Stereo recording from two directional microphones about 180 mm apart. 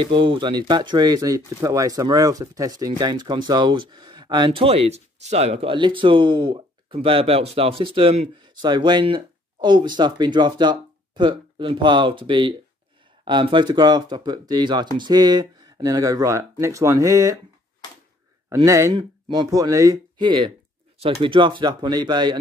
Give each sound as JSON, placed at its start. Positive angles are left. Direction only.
{"t": 0.0, "sound": "speech", "side_deg": -30}
{"t": 18.5, "sound": "speech", "side_deg": -15}